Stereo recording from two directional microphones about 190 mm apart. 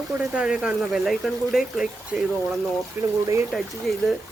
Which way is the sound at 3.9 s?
Centre (ahead or behind).